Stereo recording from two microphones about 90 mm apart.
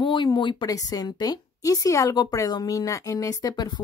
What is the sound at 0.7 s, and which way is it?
Speech, 45° left (ahead or behind).